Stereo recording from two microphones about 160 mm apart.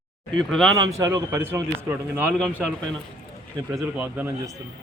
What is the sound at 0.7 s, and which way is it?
A man's voice, 20° right (ahead or behind).